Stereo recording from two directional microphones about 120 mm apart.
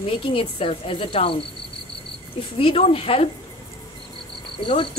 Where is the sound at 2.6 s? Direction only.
55° left (ahead or behind).